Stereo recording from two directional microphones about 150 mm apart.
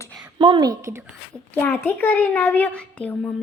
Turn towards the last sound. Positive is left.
turn(degrees=5)  # may be behind; listen again after turning